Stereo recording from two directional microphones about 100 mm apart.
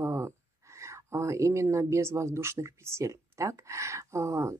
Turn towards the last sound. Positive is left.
turn(degrees=-30)  # may be behind; listen again after turning